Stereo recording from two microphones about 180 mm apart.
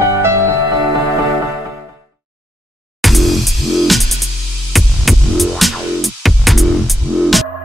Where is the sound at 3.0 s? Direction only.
Centre (ahead or behind).